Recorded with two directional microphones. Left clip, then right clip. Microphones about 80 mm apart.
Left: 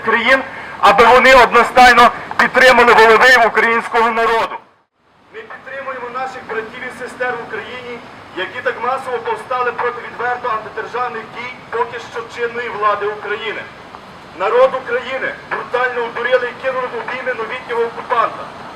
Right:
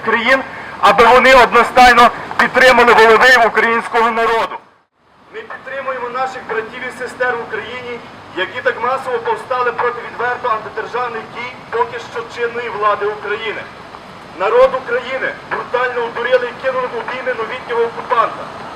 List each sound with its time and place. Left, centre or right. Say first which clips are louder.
0.0 s a man's voice: even; centre
5.9 s a sound: right 4 dB; right
6.6 s a man's voice: right 2 dB; right; by 18.3 s centre